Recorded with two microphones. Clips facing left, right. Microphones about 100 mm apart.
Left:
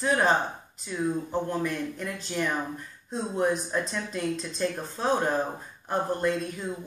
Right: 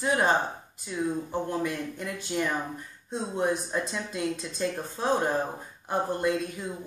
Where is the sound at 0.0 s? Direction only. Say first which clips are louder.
Left 1 dB; 15° right (ahead or behind).